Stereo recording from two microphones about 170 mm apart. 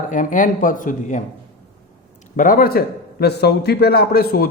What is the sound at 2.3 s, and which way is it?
A man's voice, 55° left (ahead or behind).